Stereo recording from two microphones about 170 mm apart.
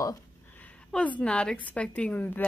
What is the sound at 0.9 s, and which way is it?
Speech, 5° left (ahead or behind).